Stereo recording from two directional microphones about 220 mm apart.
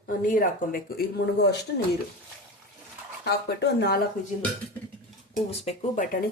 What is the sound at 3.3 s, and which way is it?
Speech, 50° left (ahead or behind).